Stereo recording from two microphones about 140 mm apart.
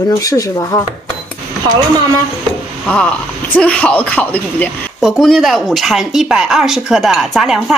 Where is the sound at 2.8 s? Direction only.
10° left (ahead or behind).